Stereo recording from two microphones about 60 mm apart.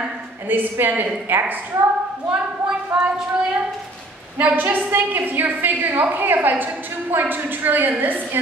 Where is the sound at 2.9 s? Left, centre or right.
Centre.